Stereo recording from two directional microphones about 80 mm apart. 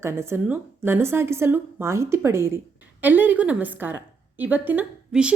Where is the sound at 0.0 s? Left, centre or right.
Right.